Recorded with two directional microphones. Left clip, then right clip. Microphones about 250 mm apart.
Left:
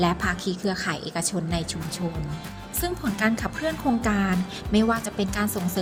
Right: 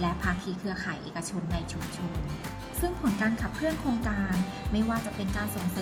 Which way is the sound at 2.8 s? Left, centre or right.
Left.